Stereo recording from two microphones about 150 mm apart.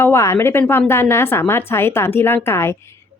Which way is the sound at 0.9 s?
15° left (ahead or behind).